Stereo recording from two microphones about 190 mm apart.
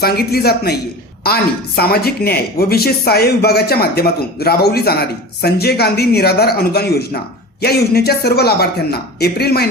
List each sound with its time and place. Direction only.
0.0 s speech: 55° left (ahead or behind)